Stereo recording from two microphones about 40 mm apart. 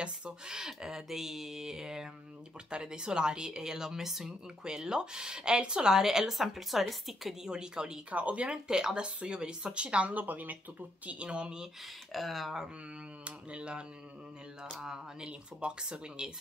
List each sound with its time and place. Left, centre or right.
0.0 s a woman's voice: right
5.9 s a woman's voice: centre
7.4 s a woman's voice: centre
8.1 s speech: right
8.5 s a woman's voice: centre
10.1 s speech: right
11.1 s a woman's voice: right
12.1 s a woman's voice: centre
13.2 s a woman's voice: right
14.9 s a woman's voice: right